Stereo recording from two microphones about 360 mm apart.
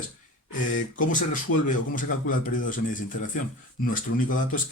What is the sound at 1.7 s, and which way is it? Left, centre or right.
A man's voice, left.